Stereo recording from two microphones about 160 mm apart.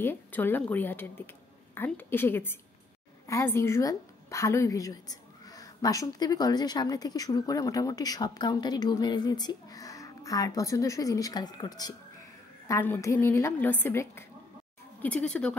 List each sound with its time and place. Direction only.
0.0 s a woman's voice: 15° left (ahead or behind)